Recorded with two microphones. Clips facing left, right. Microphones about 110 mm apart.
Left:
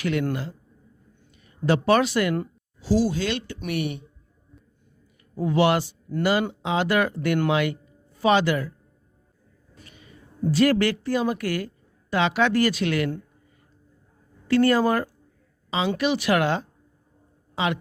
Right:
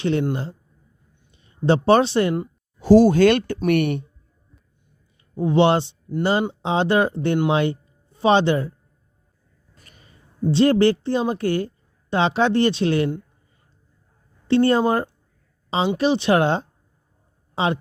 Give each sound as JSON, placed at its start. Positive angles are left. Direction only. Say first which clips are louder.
{"t": 0.0, "sound": "speech", "louder": "right 3 dB", "side_deg": -30}
{"t": 2.7, "sound": "speech", "louder": "right 10 dB", "side_deg": -55}
{"t": 5.4, "sound": "speech", "louder": "right 4 dB", "side_deg": -25}
{"t": 9.8, "sound": "a woman's voice", "louder": "left 4 dB", "side_deg": -40}
{"t": 14.4, "sound": "speech", "louder": "right 2 dB", "side_deg": -25}